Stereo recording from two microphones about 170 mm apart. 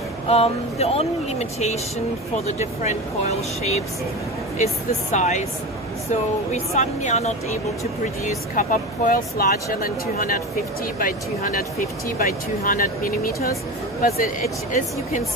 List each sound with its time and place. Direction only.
0.3 s speech: 35° left (ahead or behind)
5.1 s speech: 45° left (ahead or behind)
6.5 s speech: 45° left (ahead or behind)
8.5 s speech: 50° left (ahead or behind)